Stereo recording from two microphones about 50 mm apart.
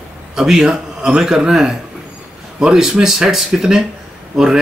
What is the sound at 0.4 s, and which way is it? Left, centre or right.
Speech, centre.